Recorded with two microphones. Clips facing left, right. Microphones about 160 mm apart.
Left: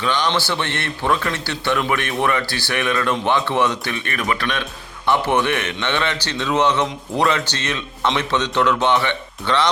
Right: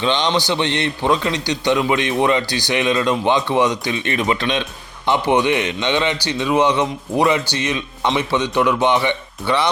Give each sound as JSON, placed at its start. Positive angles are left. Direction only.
{"t": 0.0, "sound": "a man's voice", "side_deg": -20}